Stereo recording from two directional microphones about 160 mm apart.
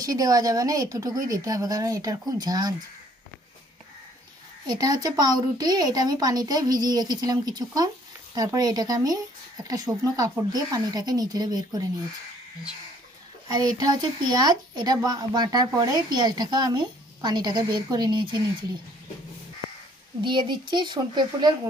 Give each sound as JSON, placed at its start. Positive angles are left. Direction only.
{"t": 0.0, "sound": "speech", "side_deg": -20}
{"t": 4.6, "sound": "speech", "side_deg": -25}
{"t": 13.5, "sound": "speech", "side_deg": -25}
{"t": 20.2, "sound": "speech", "side_deg": -30}